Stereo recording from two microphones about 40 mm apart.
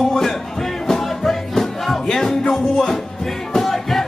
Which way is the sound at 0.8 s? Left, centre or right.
Centre.